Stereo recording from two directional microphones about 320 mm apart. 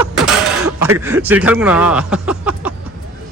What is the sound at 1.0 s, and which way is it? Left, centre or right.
Speech, centre.